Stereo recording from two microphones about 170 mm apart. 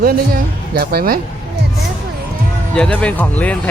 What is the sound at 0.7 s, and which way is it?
Speech, 65° right (ahead or behind).